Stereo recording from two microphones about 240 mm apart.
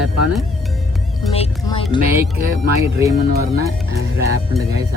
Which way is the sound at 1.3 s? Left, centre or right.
Left.